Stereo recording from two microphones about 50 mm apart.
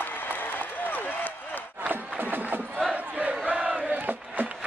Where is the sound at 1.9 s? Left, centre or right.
Right.